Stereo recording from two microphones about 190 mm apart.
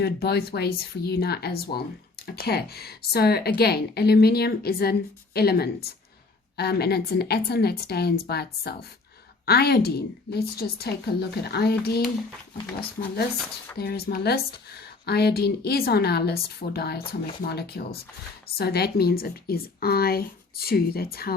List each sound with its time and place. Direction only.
0.0 s a woman's voice: 55° left (ahead or behind)
13.7 s a woman's voice: 55° left (ahead or behind)